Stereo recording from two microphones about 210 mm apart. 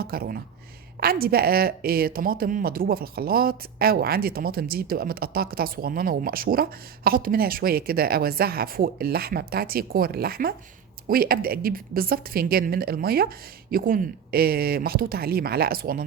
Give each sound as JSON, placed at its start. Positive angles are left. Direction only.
{"t": 0.0, "sound": "speech", "side_deg": -45}